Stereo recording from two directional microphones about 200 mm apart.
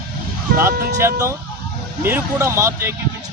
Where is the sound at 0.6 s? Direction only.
15° right (ahead or behind).